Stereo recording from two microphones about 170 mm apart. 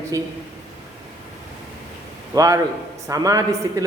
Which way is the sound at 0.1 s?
20° right (ahead or behind).